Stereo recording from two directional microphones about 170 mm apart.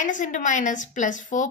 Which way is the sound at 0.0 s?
50° left (ahead or behind).